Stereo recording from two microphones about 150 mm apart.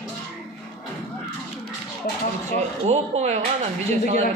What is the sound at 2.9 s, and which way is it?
Speech, 45° right (ahead or behind).